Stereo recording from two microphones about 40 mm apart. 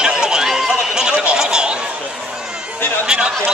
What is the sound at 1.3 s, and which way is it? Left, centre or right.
Chatter, centre.